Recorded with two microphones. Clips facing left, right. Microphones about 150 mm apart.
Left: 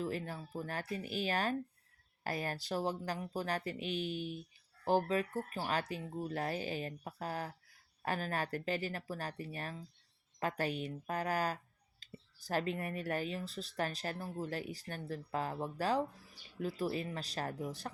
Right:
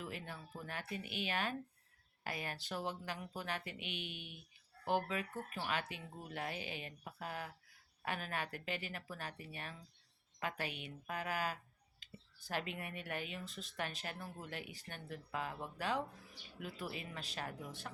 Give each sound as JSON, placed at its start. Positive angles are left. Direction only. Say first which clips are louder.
{"t": 0.0, "sound": "speech", "louder": "left 8 dB", "side_deg": 40}